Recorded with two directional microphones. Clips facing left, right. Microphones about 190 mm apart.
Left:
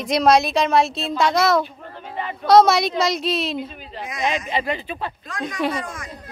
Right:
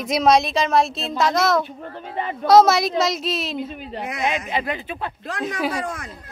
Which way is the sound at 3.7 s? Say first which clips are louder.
Right 2 dB; 60° right (ahead or behind).